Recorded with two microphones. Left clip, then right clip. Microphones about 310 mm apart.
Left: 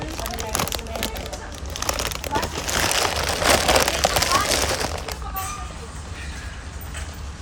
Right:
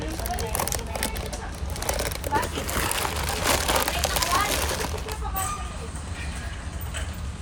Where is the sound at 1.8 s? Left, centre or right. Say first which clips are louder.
Left 3 dB; left.